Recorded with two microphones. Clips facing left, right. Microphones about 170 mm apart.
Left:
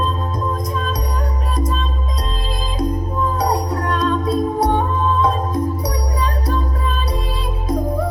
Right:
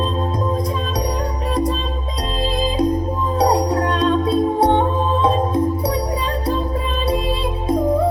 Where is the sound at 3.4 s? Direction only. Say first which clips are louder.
Right 8 dB; 30° right (ahead or behind).